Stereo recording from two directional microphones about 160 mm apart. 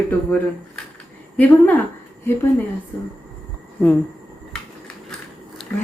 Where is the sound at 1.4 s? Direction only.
10° left (ahead or behind).